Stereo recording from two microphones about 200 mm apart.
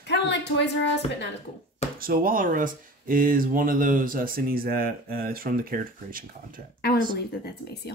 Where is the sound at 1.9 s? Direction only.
45° right (ahead or behind).